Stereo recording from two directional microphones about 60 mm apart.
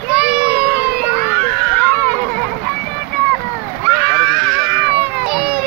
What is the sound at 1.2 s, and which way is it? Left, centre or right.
Children playing, left.